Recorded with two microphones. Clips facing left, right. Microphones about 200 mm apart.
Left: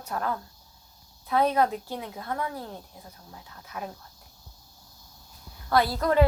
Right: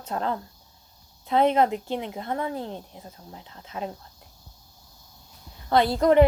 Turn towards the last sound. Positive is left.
turn(degrees=-20)  # may be behind; listen again after turning